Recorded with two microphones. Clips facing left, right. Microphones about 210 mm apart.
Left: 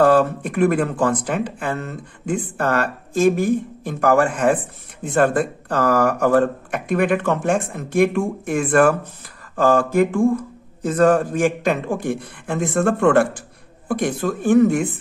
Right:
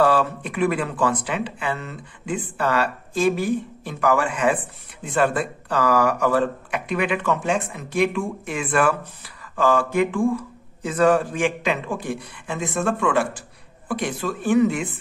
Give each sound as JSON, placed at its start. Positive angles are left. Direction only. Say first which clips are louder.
{"t": 0.0, "sound": "speech", "louder": "left 4 dB", "side_deg": 45}